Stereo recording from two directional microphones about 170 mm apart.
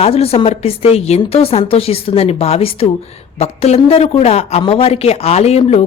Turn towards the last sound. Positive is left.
turn(degrees=35)  # may be behind; listen again after turning